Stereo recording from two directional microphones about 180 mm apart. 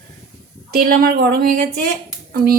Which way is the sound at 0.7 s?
55° right (ahead or behind).